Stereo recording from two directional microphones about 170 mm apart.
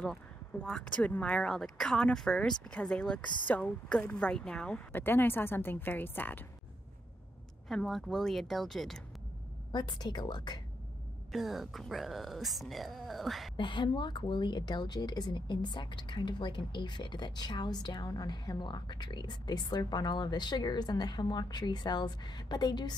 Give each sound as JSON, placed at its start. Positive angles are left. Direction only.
{"t": 0.0, "sound": "speech", "side_deg": 5}
{"t": 7.6, "sound": "speech", "side_deg": 0}
{"t": 9.7, "sound": "a woman's voice", "side_deg": 25}
{"t": 11.3, "sound": "speech", "side_deg": 0}
{"t": 13.6, "sound": "a woman's voice", "side_deg": 30}